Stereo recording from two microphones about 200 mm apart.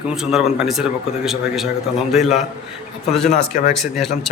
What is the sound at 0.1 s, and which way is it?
Speech, centre (ahead or behind).